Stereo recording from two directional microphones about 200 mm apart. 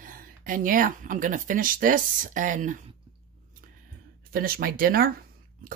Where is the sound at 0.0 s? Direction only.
45° right (ahead or behind).